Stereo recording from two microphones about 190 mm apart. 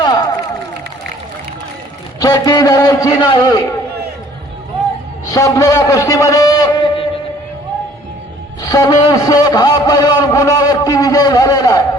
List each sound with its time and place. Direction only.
0.0 s run: 20° left (ahead or behind)
2.2 s a man's voice: 20° left (ahead or behind)
5.3 s a man's voice: 15° left (ahead or behind)
8.6 s a sound: 20° left (ahead or behind)